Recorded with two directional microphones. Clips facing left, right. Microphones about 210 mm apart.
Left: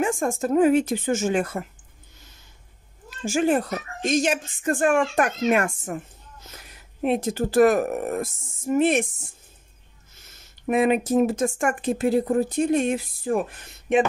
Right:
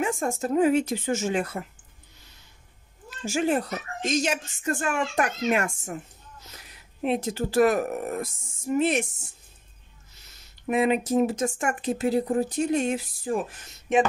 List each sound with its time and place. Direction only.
0.0 s speech: 50° left (ahead or behind)
3.3 s speech: 50° left (ahead or behind)